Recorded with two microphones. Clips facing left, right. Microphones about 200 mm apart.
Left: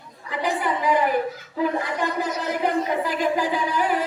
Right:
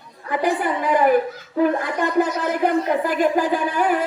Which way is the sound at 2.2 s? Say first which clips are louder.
Right 8 dB; 50° right (ahead or behind).